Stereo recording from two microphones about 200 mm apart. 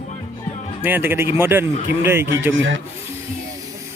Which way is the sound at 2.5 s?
70° right (ahead or behind).